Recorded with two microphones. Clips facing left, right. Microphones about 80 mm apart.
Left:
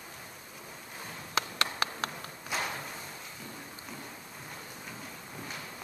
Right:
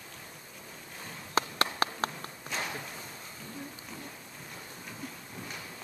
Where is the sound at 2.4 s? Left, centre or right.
Centre.